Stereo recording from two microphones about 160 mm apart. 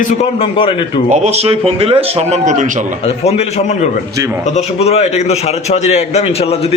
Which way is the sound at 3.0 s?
40° left (ahead or behind).